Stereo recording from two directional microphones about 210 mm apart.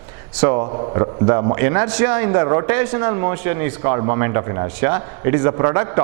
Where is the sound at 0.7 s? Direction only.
30° right (ahead or behind).